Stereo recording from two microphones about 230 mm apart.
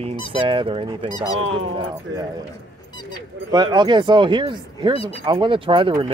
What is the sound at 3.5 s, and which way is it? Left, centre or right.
Speech, centre.